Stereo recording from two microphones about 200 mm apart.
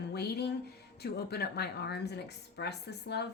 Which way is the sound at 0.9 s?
55° left (ahead or behind).